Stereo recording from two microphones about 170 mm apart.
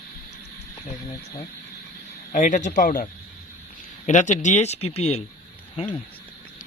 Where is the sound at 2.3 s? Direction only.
50° left (ahead or behind).